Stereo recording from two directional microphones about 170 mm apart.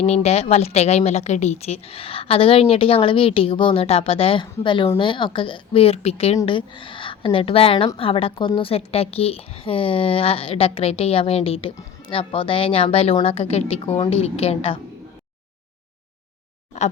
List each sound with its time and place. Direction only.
0.0 s a woman's voice: 40° left (ahead or behind)